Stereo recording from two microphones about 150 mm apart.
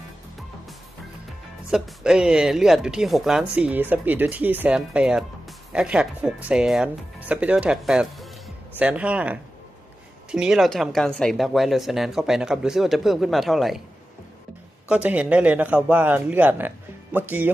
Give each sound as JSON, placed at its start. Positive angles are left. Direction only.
{"t": 1.7, "sound": "speech", "side_deg": -5}
{"t": 14.8, "sound": "speech", "side_deg": -10}